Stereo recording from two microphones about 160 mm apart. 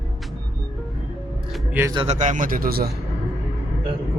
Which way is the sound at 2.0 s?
50° right (ahead or behind).